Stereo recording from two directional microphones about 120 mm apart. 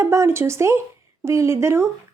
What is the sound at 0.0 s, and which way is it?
A woman's voice, 25° right (ahead or behind).